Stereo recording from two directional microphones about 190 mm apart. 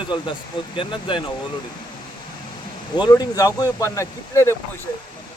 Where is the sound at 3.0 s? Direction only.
20° left (ahead or behind).